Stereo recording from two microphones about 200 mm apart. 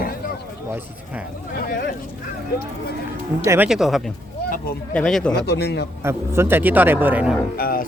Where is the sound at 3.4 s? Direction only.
15° right (ahead or behind).